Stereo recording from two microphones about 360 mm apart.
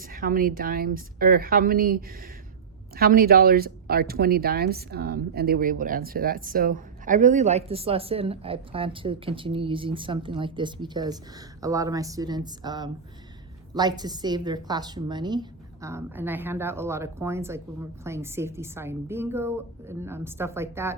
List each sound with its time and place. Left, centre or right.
0.0 s a woman's voice: right; by 20.9 s centre